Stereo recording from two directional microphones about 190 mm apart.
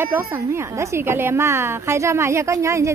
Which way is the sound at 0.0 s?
15° right (ahead or behind).